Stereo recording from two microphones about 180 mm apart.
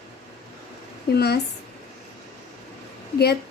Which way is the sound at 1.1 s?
60° left (ahead or behind).